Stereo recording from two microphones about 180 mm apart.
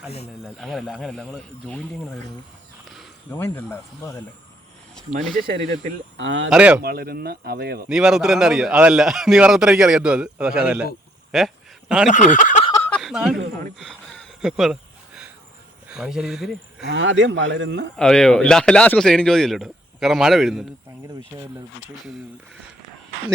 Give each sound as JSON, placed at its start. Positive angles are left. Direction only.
{"t": 0.4, "sound": "a man's voice", "side_deg": 0}
{"t": 3.2, "sound": "speech", "side_deg": 10}
{"t": 6.1, "sound": "speech", "side_deg": -90}
{"t": 6.5, "sound": "speech", "side_deg": -5}
{"t": 6.8, "sound": "speech", "side_deg": -55}
{"t": 7.9, "sound": "a man's voice", "side_deg": -5}
{"t": 11.3, "sound": "a sound", "side_deg": 0}
{"t": 12.1, "sound": "speech", "side_deg": 45}
{"t": 12.7, "sound": "a sound", "side_deg": 10}
{"t": 13.0, "sound": "a sound", "side_deg": 0}
{"t": 15.9, "sound": "speech", "side_deg": -5}
{"t": 16.8, "sound": "speech", "side_deg": -90}
{"t": 17.9, "sound": "a man's voice", "side_deg": 5}